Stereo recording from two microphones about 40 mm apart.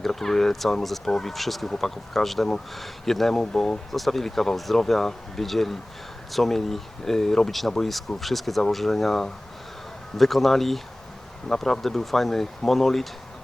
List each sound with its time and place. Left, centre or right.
0.0 s speech: centre
3.4 s speech: centre
3.9 s speech: centre